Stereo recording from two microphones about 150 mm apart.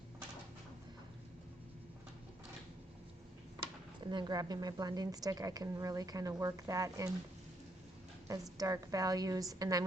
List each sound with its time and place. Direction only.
4.0 s a woman's voice: 30° right (ahead or behind)
8.3 s a woman's voice: 20° right (ahead or behind)